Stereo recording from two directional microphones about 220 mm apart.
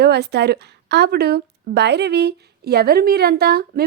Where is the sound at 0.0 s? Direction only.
50° right (ahead or behind).